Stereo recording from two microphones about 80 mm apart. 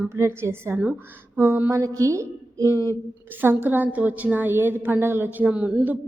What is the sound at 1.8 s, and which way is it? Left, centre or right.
Speech, right.